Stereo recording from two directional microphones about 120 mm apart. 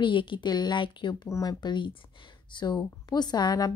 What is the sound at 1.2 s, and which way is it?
Speech, 25° left (ahead or behind).